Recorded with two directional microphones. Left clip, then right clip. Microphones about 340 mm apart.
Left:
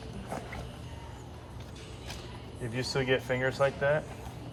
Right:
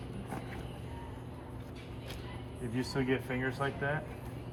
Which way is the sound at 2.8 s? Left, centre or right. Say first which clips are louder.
Left 5 dB; centre.